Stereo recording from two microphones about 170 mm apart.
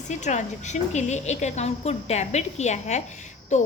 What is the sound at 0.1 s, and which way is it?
A woman's voice, 45° left (ahead or behind).